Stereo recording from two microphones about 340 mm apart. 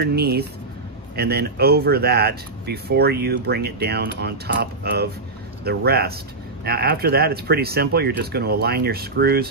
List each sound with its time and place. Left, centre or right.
0.0 s speech: right